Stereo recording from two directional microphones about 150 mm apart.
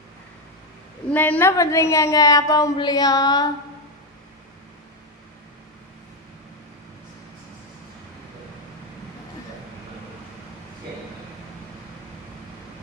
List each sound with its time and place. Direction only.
1.1 s a woman's voice: 10° left (ahead or behind)